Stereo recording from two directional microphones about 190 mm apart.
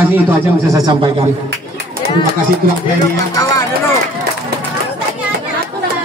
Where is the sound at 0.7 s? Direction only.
20° right (ahead or behind).